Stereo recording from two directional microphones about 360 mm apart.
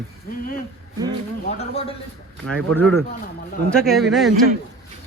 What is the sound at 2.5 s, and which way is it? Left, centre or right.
Speech, centre.